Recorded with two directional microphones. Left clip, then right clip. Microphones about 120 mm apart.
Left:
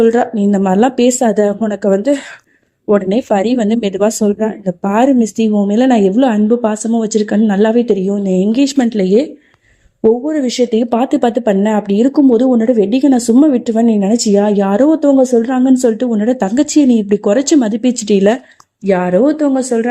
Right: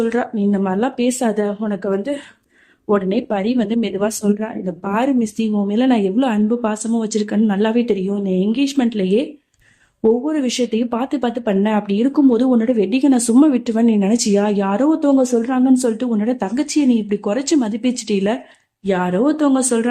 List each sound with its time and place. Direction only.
0.0 s a woman's voice: 40° left (ahead or behind)
1.2 s a woman's voice: 30° left (ahead or behind)
7.7 s speech: 20° left (ahead or behind)
8.2 s a woman's voice: 40° left (ahead or behind)
10.2 s speech: 20° left (ahead or behind)
16.6 s a woman's voice: 35° left (ahead or behind)
19.4 s speech: 15° left (ahead or behind)